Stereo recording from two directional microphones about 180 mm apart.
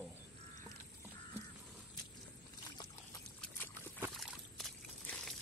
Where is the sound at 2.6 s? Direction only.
20° left (ahead or behind).